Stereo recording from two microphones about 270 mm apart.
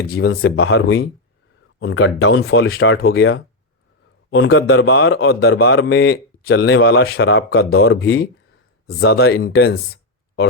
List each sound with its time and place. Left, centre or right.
0.1 s a man's voice: left
1.8 s a man's voice: left